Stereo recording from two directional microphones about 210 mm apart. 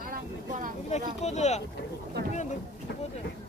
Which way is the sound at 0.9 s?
35° left (ahead or behind).